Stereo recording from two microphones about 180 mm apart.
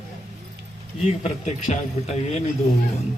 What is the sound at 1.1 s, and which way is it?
A man's voice, 40° left (ahead or behind).